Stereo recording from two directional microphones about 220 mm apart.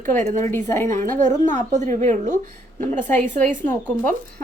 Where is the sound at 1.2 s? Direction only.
35° right (ahead or behind).